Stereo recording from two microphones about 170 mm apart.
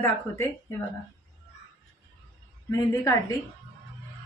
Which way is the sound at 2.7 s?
15° left (ahead or behind).